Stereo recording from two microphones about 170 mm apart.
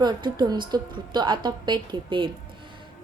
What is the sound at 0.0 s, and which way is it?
A woman's voice, 25° right (ahead or behind).